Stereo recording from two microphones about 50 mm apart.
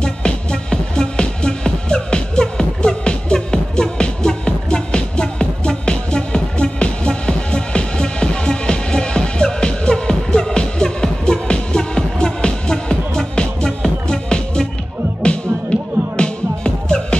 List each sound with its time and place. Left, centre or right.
0.0 s music: centre
16.2 s music: centre